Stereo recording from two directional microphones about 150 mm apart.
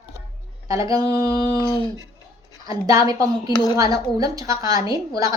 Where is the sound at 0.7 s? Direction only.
25° right (ahead or behind).